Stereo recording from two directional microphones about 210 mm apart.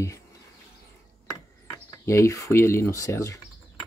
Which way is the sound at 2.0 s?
15° left (ahead or behind).